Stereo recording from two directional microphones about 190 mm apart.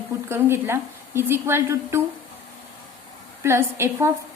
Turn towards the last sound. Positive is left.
turn(degrees=-15)  # may be behind; listen again after turning